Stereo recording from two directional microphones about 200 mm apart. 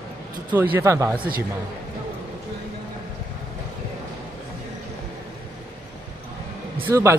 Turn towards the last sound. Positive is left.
turn(degrees=-15)  # may be behind; listen again after turning